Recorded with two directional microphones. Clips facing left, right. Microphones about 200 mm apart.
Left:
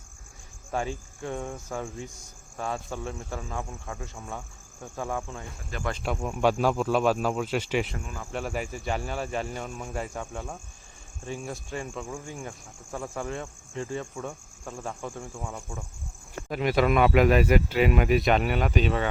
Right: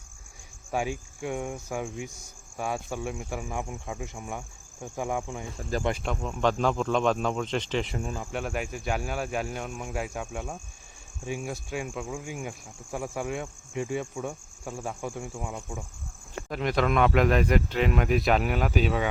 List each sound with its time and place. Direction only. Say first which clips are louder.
0.7 s speech: right 1 dB; 10° right (ahead or behind)
6.0 s speech: left 2 dB; 5° left (ahead or behind); by 15.8 s 10° right (ahead or behind)
16.5 s speech: left 2 dB; 5° left (ahead or behind)